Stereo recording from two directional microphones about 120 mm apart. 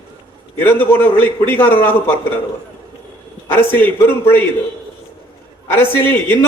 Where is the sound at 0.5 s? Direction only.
15° left (ahead or behind).